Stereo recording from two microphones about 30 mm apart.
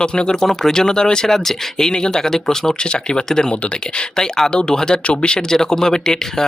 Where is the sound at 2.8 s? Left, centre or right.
Left.